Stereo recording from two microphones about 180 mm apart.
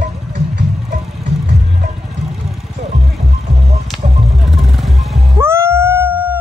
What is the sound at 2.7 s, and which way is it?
Music, 35° right (ahead or behind).